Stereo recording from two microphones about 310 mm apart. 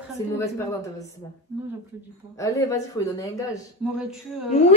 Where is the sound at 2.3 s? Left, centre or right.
Centre.